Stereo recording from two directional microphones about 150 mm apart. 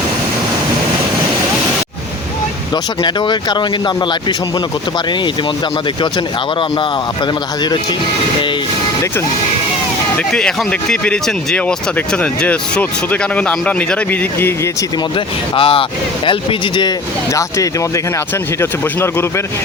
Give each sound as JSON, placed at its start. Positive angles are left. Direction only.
{"t": 3.0, "sound": "speech", "side_deg": 30}
{"t": 10.3, "sound": "speech", "side_deg": 5}
{"t": 15.5, "sound": "speech", "side_deg": 35}
{"t": 17.3, "sound": "speech", "side_deg": 20}